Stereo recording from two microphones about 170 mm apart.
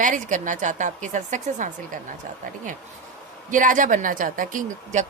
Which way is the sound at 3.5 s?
50° right (ahead or behind).